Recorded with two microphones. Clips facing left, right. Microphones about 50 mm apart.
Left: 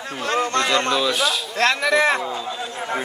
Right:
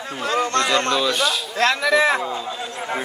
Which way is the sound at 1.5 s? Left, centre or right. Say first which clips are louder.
Right 1 dB; left.